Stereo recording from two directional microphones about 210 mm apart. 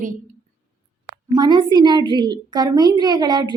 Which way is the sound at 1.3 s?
20° right (ahead or behind).